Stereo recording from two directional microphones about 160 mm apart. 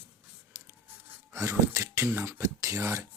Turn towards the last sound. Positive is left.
turn(degrees=-15)  # may be behind; listen again after turning